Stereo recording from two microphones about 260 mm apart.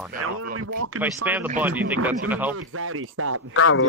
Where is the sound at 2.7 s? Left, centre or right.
Right.